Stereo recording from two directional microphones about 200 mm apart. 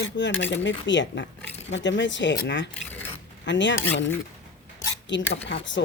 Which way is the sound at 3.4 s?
65° left (ahead or behind).